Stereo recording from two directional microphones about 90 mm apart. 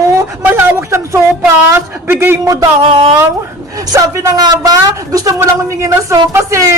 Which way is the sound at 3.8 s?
45° right (ahead or behind).